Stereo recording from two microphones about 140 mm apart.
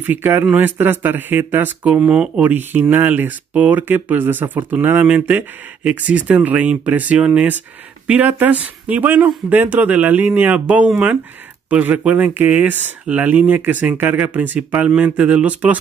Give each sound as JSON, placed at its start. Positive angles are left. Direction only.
{"t": 0.0, "sound": "speech", "side_deg": -15}